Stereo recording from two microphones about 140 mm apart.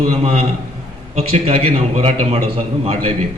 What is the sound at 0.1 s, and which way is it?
A man's voice, 45° right (ahead or behind).